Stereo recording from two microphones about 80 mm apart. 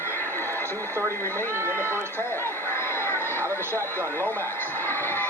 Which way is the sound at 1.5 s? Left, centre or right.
Right.